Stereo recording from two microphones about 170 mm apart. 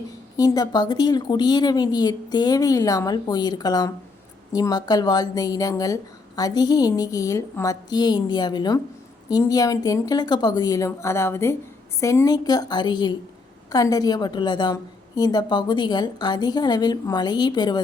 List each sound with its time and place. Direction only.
0.3 s a woman's voice: 20° left (ahead or behind)